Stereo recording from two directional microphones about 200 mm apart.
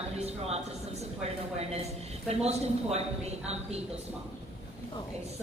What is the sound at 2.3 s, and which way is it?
Speech, 30° right (ahead or behind).